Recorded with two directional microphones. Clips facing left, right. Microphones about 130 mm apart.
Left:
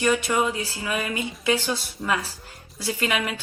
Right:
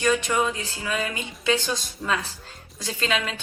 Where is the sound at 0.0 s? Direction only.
15° left (ahead or behind).